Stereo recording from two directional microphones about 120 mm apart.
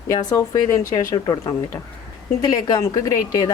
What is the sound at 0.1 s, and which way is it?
Speech, 30° left (ahead or behind).